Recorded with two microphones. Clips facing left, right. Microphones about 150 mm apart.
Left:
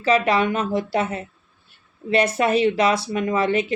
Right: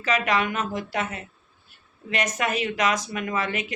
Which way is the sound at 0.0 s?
30° left (ahead or behind).